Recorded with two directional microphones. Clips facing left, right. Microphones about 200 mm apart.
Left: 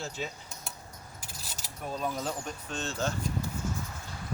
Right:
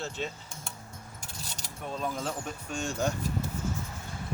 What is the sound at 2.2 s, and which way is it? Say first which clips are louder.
Speech: even; 5° right (ahead or behind).